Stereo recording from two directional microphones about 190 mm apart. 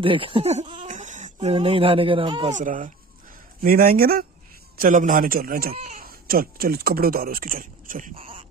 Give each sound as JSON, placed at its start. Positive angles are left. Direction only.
{"t": 0.0, "sound": "speech", "side_deg": -30}
{"t": 2.5, "sound": "speech", "side_deg": -45}
{"t": 8.2, "sound": "a sound", "side_deg": -30}